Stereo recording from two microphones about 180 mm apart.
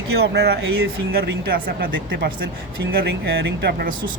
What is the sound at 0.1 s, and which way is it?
Speech, 65° right (ahead or behind).